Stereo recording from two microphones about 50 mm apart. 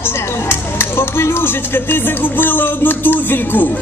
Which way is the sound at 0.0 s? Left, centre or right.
Left.